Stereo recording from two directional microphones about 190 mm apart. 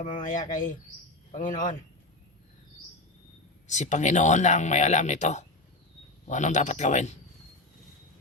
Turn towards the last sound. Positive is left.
turn(degrees=35)  # may be behind; listen again after turning